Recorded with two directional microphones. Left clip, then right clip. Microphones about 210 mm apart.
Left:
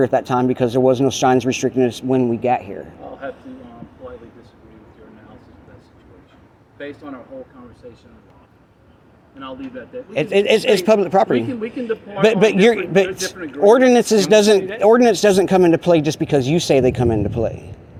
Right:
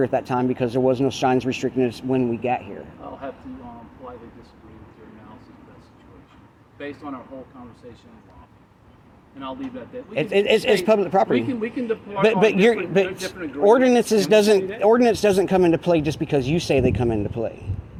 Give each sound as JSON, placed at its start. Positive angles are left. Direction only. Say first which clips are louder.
{"t": 0.0, "sound": "speech", "louder": "left 5 dB", "side_deg": 25}
{"t": 10.1, "sound": "speech", "louder": "left 3 dB", "side_deg": 20}
{"t": 11.3, "sound": "speech", "louder": "left 2 dB", "side_deg": 0}
{"t": 12.2, "sound": "speech", "louder": "left 4 dB", "side_deg": 20}